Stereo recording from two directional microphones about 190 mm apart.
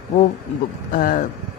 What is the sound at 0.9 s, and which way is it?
Speech, 45° left (ahead or behind).